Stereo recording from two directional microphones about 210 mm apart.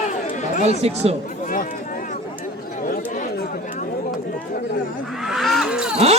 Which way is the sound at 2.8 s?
40° left (ahead or behind).